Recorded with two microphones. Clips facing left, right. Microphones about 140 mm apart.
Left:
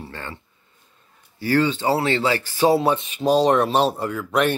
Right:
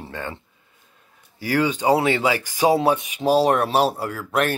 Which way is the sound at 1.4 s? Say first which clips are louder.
Left 1 dB; 10° right (ahead or behind).